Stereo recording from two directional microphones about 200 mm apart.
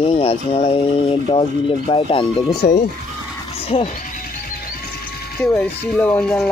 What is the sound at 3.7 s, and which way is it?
Speech, 25° left (ahead or behind).